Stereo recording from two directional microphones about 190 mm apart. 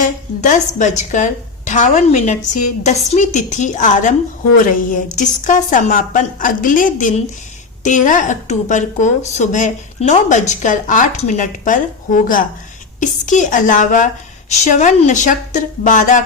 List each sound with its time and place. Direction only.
0.0 s a woman's voice: 40° left (ahead or behind)